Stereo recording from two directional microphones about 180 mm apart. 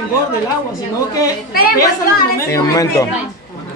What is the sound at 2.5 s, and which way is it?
Speech, 15° left (ahead or behind).